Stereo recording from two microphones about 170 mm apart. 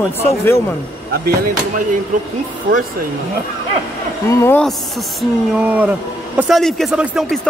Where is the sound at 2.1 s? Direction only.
45° right (ahead or behind).